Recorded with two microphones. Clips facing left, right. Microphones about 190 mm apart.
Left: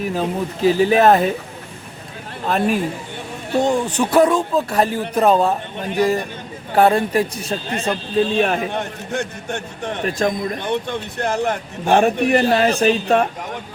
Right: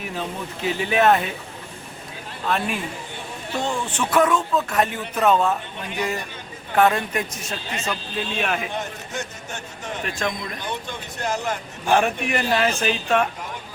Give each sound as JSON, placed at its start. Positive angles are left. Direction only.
{"t": 0.0, "sound": "speech", "side_deg": 40}
{"t": 2.5, "sound": "speech", "side_deg": 40}
{"t": 7.7, "sound": "speech", "side_deg": 55}
{"t": 8.1, "sound": "speech", "side_deg": 35}
{"t": 8.7, "sound": "speech", "side_deg": 60}
{"t": 10.0, "sound": "speech", "side_deg": 35}
{"t": 10.7, "sound": "speech", "side_deg": 60}
{"t": 11.9, "sound": "speech", "side_deg": 35}